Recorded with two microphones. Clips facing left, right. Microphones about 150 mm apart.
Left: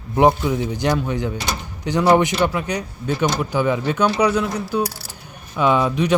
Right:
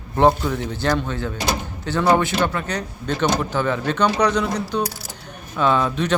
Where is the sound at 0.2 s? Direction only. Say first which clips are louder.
Left 1 dB; 15° left (ahead or behind).